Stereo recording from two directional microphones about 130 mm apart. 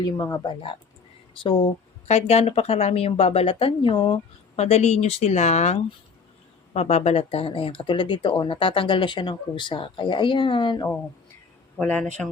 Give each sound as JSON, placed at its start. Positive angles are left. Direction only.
{"t": 0.0, "sound": "speech", "side_deg": 25}
{"t": 0.4, "sound": "speech", "side_deg": 40}
{"t": 4.5, "sound": "speech", "side_deg": 55}
{"t": 11.8, "sound": "speech", "side_deg": 10}